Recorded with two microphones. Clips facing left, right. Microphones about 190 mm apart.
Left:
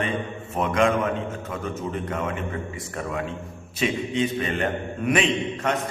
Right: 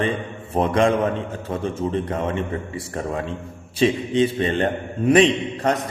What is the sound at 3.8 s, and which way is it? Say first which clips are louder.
A man's voice: right 6 dB; 30° right (ahead or behind).